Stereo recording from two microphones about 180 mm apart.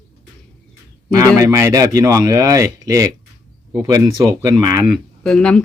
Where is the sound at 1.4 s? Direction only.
15° right (ahead or behind).